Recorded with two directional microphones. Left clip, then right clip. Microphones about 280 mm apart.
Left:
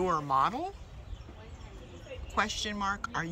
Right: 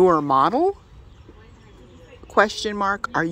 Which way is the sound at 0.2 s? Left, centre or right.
Right.